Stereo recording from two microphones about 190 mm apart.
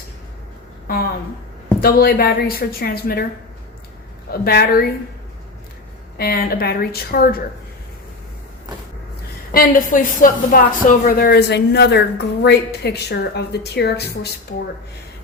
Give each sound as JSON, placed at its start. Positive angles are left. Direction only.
{"t": 1.8, "sound": "a woman's voice", "side_deg": 55}
{"t": 4.3, "sound": "a woman's voice", "side_deg": 55}
{"t": 6.1, "sound": "a woman's voice", "side_deg": 55}
{"t": 9.5, "sound": "a woman's voice", "side_deg": 45}